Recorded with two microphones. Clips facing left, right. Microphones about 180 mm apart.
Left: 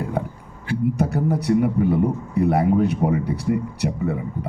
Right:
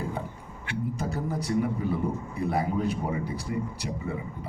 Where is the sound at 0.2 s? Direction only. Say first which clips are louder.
Left 9 dB; 65° left (ahead or behind).